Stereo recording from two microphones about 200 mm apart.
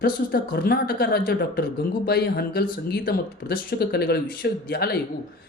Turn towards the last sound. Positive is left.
turn(degrees=50)  # may be behind; listen again after turning